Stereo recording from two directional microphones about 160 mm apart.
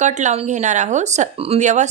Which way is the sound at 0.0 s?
50° right (ahead or behind).